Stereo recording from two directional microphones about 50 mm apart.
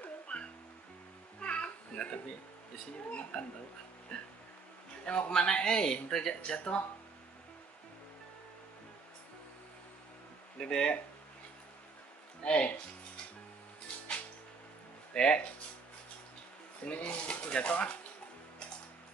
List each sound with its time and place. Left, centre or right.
0.3 s music: left
1.4 s a sound: left
3.1 s speech: left
10.6 s speech: centre
12.4 s speech: left
15.1 s speech: centre
16.8 s speech: left